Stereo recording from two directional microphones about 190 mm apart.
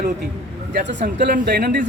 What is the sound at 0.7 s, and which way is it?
Speech, 65° right (ahead or behind).